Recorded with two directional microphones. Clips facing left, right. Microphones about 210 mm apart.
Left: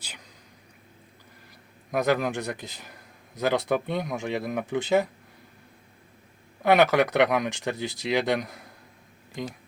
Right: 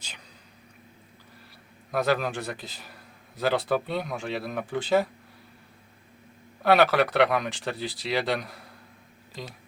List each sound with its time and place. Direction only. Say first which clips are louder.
1.9 s speech: left 1 dB; 15° left (ahead or behind)
6.6 s speech: left 1 dB; 15° left (ahead or behind)